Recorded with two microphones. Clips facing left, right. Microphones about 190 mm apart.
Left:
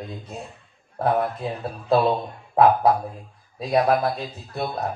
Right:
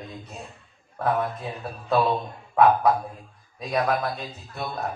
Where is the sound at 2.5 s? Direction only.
30° left (ahead or behind).